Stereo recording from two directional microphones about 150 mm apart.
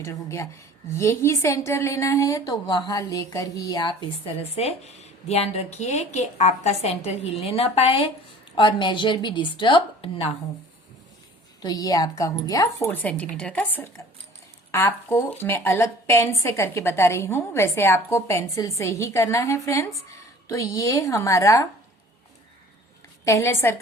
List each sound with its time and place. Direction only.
0.0 s a woman's voice: 20° left (ahead or behind)
4.4 s a woman's voice: 45° left (ahead or behind)
11.6 s a woman's voice: 25° left (ahead or behind)
12.9 s a woman's voice: 10° left (ahead or behind)
23.2 s a woman's voice: 20° left (ahead or behind)